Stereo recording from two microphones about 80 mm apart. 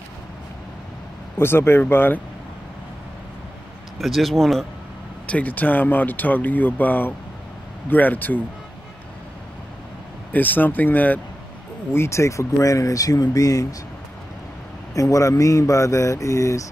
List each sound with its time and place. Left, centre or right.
1.4 s speech: left
4.0 s speech: centre
5.2 s speech: centre
10.3 s speech: left
11.9 s speech: left
15.0 s speech: left